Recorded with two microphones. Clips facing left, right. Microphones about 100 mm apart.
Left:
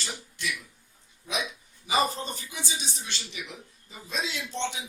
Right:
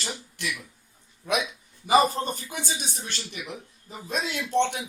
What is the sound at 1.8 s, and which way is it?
Speech, 50° right (ahead or behind).